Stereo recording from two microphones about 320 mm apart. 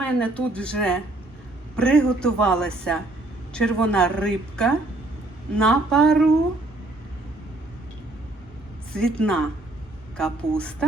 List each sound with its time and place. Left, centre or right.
0.0 s speech: centre
8.9 s speech: centre